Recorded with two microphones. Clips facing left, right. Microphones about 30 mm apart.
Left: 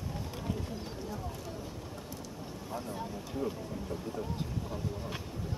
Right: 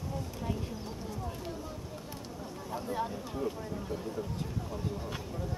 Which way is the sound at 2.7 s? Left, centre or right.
Centre.